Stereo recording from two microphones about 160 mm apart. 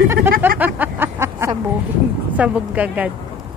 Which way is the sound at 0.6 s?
10° right (ahead or behind).